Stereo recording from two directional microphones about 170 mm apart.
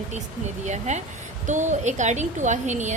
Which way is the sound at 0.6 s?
45° right (ahead or behind).